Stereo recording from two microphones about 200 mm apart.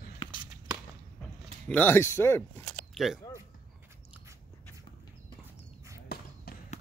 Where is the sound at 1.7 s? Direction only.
10° left (ahead or behind).